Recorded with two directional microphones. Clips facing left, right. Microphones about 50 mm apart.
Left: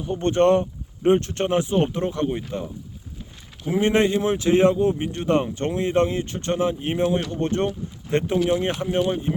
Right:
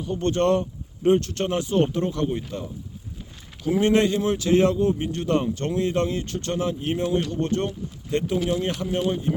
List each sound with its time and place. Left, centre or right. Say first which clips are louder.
0.0 s speech: left 3 dB; left